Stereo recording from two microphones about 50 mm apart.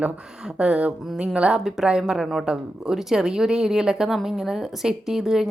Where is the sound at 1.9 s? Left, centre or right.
Centre.